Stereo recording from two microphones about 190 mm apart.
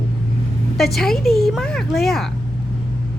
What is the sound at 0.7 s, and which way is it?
Speech, centre (ahead or behind).